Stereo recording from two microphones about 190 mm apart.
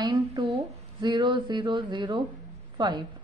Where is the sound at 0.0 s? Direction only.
25° right (ahead or behind).